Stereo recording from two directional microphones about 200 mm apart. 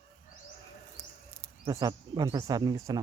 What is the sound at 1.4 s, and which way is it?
Speech, 15° right (ahead or behind).